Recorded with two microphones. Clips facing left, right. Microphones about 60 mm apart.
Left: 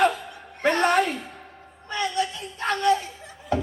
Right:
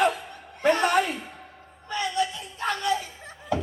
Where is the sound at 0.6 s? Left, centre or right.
Left.